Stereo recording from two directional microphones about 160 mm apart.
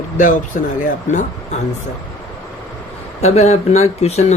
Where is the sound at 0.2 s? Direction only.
55° left (ahead or behind).